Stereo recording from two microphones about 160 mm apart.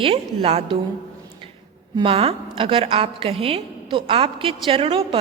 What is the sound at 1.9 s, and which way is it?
A woman's voice, 35° right (ahead or behind).